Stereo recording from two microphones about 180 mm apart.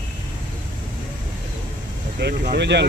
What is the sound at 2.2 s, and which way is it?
Speech, 70° right (ahead or behind).